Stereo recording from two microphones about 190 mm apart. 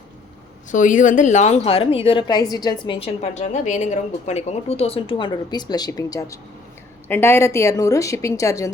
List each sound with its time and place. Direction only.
0.7 s a woman's voice: 45° left (ahead or behind); by 8.7 s 15° left (ahead or behind)